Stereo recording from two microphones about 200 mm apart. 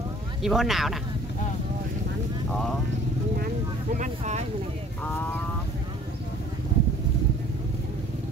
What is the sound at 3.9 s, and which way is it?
Speech, 35° right (ahead or behind).